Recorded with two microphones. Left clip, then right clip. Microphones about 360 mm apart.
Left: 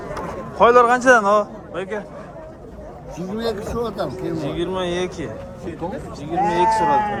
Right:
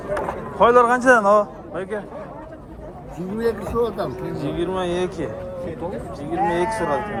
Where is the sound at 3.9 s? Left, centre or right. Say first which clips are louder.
Left 2 dB; centre.